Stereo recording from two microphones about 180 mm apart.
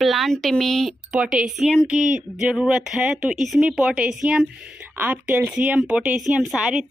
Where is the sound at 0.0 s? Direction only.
Centre (ahead or behind).